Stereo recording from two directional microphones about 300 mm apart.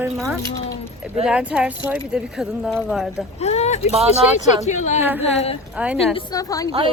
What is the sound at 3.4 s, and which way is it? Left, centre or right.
Speech, left.